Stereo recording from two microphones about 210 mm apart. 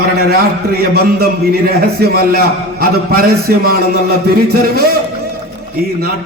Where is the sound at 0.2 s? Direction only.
45° right (ahead or behind).